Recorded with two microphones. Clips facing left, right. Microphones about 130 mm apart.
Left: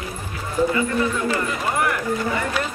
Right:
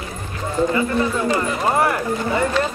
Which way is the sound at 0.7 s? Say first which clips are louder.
Right 2 dB; 35° right (ahead or behind).